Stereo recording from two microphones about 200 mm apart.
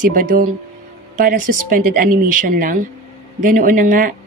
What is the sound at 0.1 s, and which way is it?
A woman's voice, 45° right (ahead or behind).